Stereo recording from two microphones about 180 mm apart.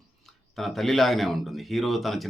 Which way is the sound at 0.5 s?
Centre (ahead or behind).